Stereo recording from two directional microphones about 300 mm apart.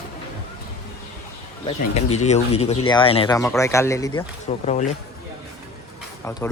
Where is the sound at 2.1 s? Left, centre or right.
Left.